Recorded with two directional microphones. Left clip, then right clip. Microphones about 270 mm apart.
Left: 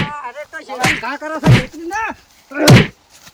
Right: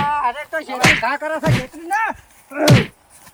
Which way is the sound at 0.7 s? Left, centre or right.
Centre.